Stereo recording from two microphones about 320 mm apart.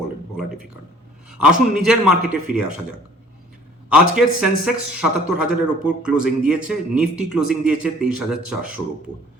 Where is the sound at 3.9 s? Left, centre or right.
Centre.